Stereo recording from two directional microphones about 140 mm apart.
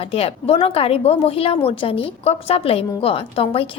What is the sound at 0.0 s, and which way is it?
A woman's voice, 45° left (ahead or behind).